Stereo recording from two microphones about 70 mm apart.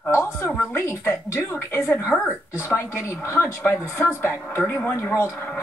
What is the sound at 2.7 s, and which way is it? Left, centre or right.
Speech, left.